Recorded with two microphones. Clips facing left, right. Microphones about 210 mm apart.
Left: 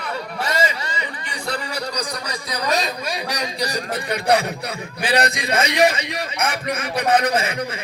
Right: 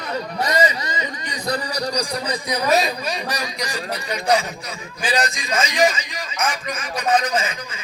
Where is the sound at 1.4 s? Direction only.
40° right (ahead or behind).